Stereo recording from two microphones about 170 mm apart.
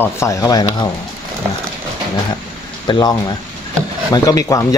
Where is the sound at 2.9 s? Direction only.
25° left (ahead or behind).